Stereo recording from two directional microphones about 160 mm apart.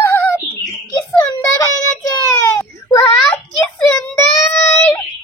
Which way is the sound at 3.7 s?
5° left (ahead or behind).